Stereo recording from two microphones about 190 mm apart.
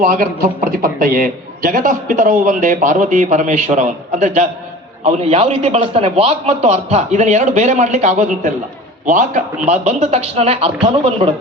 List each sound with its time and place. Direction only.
0.1 s a man's voice: 50° right (ahead or behind); by 11.3 s 30° right (ahead or behind)